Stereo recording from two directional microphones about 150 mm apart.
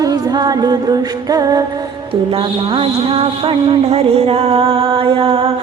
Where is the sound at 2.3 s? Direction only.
40° right (ahead or behind).